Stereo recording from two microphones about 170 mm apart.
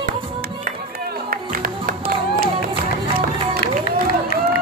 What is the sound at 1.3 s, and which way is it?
Music, 55° right (ahead or behind).